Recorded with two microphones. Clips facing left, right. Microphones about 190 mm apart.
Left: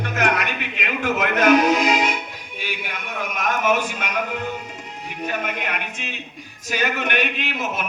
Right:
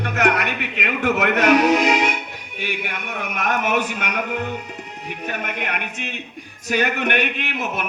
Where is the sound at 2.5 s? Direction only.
60° right (ahead or behind).